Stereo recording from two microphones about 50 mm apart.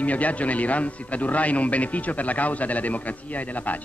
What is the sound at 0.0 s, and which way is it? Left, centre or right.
A man's voice, left.